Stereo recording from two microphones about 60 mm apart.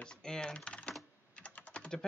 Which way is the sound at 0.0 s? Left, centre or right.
Centre.